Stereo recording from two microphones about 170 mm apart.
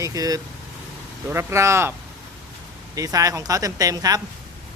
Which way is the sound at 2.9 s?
20° right (ahead or behind).